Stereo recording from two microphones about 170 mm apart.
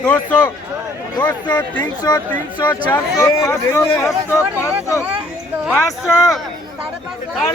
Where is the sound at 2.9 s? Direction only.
15° left (ahead or behind).